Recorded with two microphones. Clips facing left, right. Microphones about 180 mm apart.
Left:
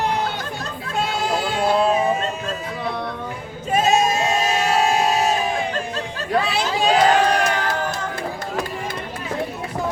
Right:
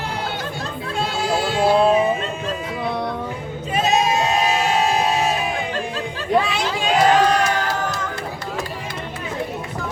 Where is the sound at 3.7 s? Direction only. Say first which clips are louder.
Left 1 dB; 45° left (ahead or behind).